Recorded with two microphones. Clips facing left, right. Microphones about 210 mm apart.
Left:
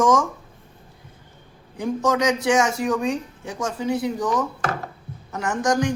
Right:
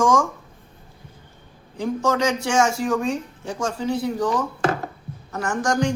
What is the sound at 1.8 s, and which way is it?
Speech, 20° left (ahead or behind).